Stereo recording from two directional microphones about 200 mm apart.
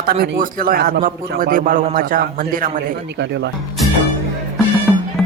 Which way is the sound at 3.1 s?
60° right (ahead or behind).